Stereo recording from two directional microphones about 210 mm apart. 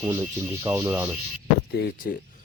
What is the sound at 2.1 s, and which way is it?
Speech, 45° left (ahead or behind).